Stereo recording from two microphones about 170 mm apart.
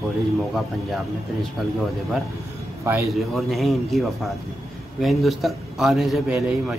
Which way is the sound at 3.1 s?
Centre (ahead or behind).